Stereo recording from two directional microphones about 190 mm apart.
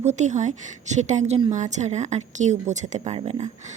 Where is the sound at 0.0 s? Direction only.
40° right (ahead or behind).